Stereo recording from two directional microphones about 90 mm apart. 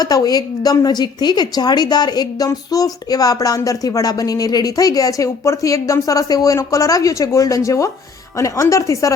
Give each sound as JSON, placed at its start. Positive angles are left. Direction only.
{"t": 0.0, "sound": "a woman's voice", "side_deg": 45}